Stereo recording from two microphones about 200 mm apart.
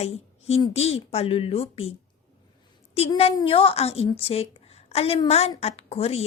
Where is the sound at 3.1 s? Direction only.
25° left (ahead or behind).